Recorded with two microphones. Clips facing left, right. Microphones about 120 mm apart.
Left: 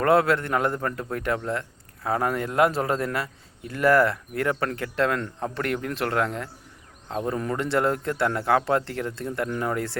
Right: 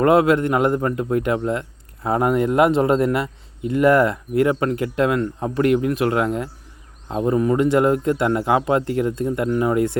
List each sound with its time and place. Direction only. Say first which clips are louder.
0.0 s speech: right 5 dB; 15° right (ahead or behind)